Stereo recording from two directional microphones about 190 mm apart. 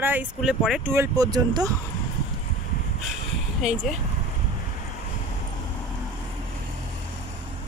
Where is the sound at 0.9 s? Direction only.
15° right (ahead or behind).